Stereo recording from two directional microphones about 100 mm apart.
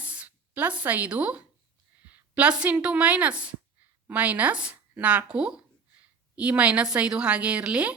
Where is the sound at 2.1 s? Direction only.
15° right (ahead or behind).